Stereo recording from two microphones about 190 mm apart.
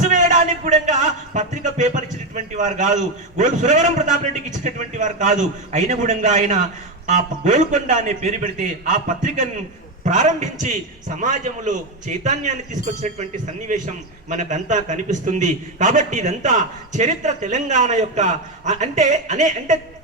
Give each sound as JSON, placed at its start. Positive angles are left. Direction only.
{"t": 0.0, "sound": "a man's voice", "side_deg": -40}